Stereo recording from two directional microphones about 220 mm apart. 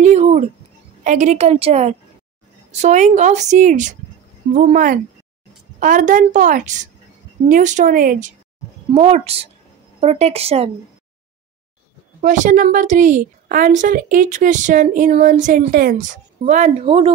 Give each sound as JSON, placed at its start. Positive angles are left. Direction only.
{"t": 0.0, "sound": "a woman's voice", "side_deg": -30}
{"t": 8.9, "sound": "a woman's voice", "side_deg": -25}
{"t": 12.2, "sound": "a woman's voice", "side_deg": -35}